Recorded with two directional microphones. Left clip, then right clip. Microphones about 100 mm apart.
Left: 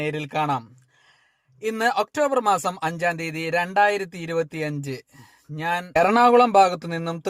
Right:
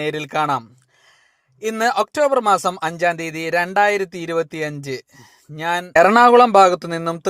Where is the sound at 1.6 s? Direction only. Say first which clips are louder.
Right 4 dB; 20° right (ahead or behind).